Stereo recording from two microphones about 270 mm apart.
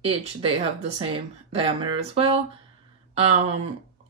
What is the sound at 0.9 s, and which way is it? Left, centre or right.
Speech, right.